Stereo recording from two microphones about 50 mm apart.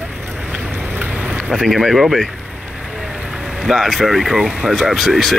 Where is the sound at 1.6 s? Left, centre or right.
Centre.